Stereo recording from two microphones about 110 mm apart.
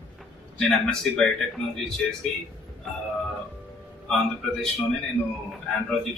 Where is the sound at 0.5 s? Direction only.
5° left (ahead or behind).